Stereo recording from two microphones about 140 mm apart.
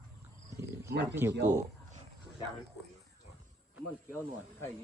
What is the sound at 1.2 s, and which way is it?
Speech, 20° right (ahead or behind).